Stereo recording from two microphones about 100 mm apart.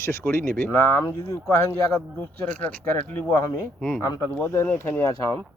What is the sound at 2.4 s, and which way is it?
Speech, 15° left (ahead or behind).